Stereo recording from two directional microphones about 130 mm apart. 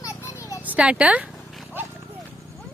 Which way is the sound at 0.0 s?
20° left (ahead or behind).